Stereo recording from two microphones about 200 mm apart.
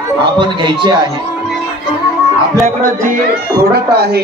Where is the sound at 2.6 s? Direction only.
40° right (ahead or behind).